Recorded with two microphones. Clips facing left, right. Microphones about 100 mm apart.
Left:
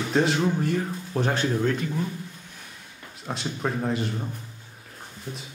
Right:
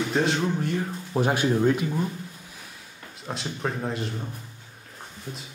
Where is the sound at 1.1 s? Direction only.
10° right (ahead or behind).